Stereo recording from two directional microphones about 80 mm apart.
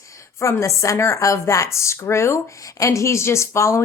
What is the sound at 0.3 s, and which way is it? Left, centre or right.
Speech, left.